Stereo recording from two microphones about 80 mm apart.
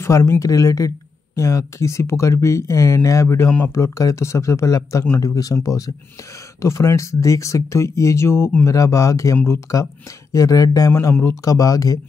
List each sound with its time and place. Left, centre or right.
0.0 s speech: left
10.9 s speech: left